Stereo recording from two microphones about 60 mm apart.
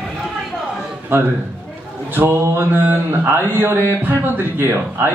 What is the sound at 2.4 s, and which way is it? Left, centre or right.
A man's voice, right.